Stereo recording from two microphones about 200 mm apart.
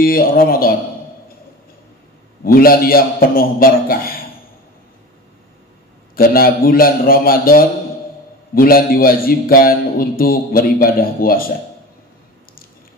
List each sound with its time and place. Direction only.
0.0 s a man's voice: 45° left (ahead or behind)
2.4 s a man's voice: 45° left (ahead or behind)
6.1 s a man's voice: 45° left (ahead or behind)